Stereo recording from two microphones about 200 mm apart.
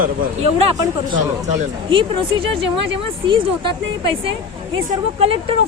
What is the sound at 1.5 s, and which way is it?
Speech, 25° right (ahead or behind).